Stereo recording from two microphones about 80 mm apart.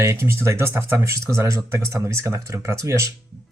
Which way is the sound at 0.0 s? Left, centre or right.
Right.